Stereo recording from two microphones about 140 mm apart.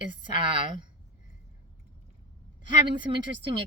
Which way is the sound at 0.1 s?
40° right (ahead or behind).